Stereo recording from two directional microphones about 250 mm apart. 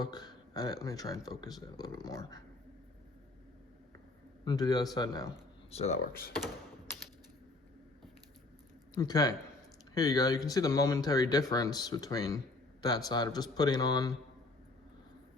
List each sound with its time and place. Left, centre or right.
0.0 s speech: centre
4.4 s speech: centre
5.7 s speech: left
9.0 s speech: centre